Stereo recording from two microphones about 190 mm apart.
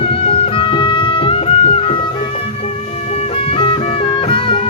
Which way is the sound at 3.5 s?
30° left (ahead or behind).